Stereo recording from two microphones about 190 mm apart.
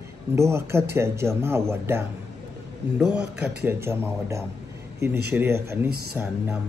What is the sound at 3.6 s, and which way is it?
Speech, 10° right (ahead or behind).